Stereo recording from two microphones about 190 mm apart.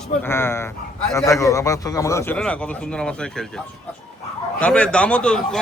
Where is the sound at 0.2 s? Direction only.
10° left (ahead or behind).